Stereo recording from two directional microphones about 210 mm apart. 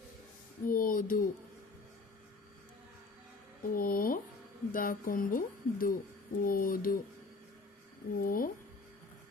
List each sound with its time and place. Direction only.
0.6 s speech: 40° left (ahead or behind)
3.6 s speech: 40° left (ahead or behind)
8.1 s speech: 45° left (ahead or behind)